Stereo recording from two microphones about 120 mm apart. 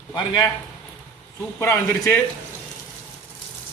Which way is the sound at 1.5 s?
20° left (ahead or behind).